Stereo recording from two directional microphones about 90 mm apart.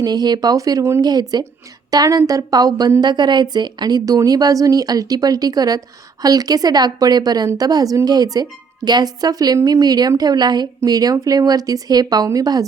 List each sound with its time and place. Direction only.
0.0 s speech: 50° right (ahead or behind); by 1.0 s 30° right (ahead or behind)
1.0 s speech: 50° right (ahead or behind)